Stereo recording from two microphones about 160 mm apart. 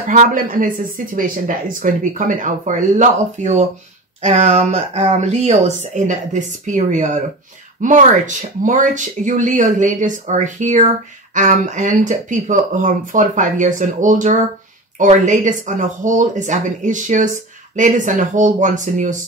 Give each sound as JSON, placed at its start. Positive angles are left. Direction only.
{"t": 0.0, "sound": "speech", "side_deg": -55}